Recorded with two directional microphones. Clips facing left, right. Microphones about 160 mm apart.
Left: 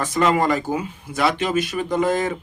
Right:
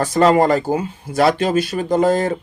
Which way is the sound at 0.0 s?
35° right (ahead or behind).